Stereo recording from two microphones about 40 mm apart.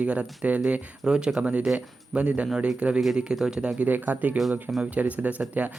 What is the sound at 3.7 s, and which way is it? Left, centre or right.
Speech, right.